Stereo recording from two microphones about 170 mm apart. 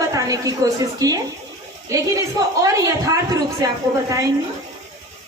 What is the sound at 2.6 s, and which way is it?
Speech, 20° right (ahead or behind).